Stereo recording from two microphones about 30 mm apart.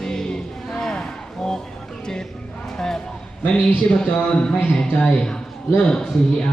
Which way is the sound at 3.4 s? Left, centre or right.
Left.